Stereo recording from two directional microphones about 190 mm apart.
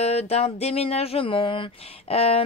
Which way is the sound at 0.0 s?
35° left (ahead or behind).